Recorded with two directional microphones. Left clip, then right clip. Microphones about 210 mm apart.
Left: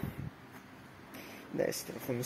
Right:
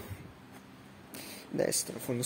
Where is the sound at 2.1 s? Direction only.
15° right (ahead or behind).